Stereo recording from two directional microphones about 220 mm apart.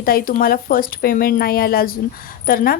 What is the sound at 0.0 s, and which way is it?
A woman's voice, 40° left (ahead or behind).